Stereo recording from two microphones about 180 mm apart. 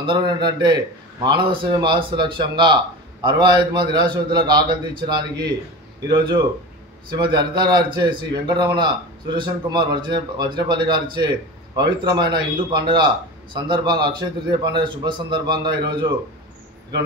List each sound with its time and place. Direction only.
0.0 s a man's voice: 25° right (ahead or behind)
6.0 s a man's voice: 25° right (ahead or behind)